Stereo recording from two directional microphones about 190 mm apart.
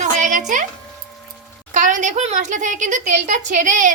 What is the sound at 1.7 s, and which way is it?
A woman's voice, 40° right (ahead or behind).